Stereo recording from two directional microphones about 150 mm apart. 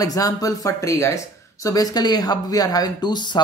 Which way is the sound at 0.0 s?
25° left (ahead or behind).